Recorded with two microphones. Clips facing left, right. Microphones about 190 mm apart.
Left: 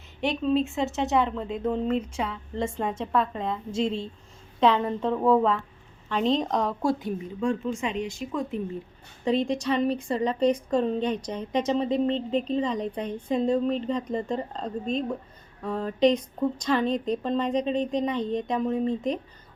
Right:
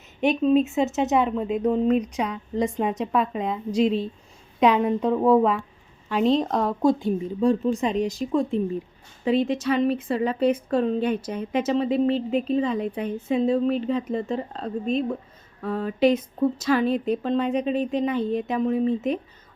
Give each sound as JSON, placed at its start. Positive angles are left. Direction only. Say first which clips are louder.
{"t": 0.2, "sound": "a woman's voice", "louder": "right 5 dB", "side_deg": -15}
{"t": 6.8, "sound": "a woman's voice", "louder": "right 6 dB", "side_deg": -30}
{"t": 9.2, "sound": "speech", "louder": "right 3 dB", "side_deg": -5}